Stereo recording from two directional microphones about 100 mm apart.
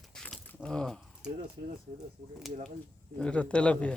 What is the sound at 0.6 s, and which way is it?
Speech, 5° left (ahead or behind).